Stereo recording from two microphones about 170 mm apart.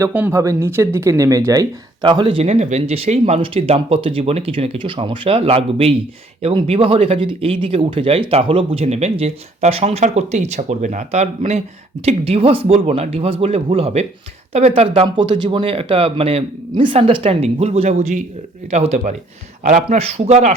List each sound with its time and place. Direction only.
0.0 s speech: 10° right (ahead or behind); by 20.6 s 40° right (ahead or behind)